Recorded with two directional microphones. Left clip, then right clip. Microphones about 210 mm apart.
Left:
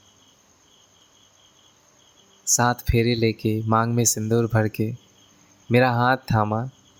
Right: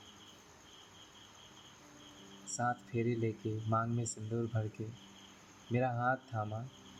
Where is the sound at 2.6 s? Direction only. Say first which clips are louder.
Left 13 dB; 55° left (ahead or behind).